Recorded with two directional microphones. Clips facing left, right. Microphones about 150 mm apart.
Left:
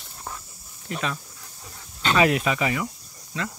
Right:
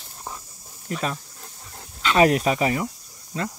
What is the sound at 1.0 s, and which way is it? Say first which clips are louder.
Dog: right 2 dB; 40° right (ahead or behind).